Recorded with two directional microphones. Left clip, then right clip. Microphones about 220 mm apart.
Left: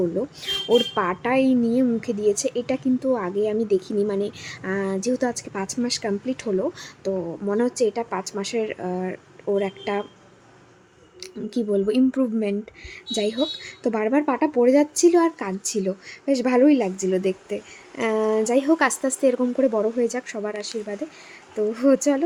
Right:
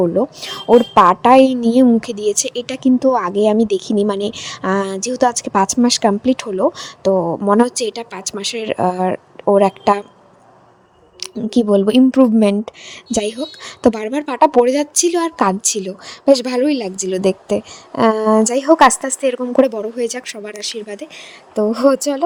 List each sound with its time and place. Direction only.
0.0 s a woman's voice: 30° right (ahead or behind)
11.2 s a woman's voice: 35° right (ahead or behind)